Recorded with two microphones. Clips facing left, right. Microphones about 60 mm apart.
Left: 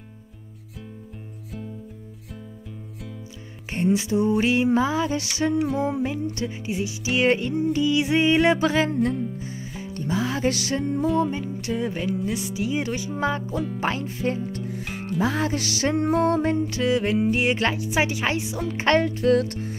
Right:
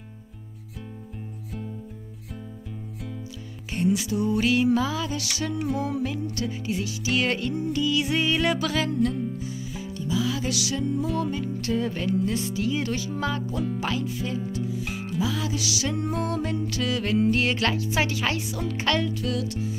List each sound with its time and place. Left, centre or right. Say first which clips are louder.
3.7 s music: left 3 dB; left
11.1 s music: left 4 dB; left
11.6 s speech: even; centre
12.1 s music: right 1 dB; centre
12.4 s speech: even; centre
13.5 s music: left 1 dB; centre
13.7 s music: left 2 dB; left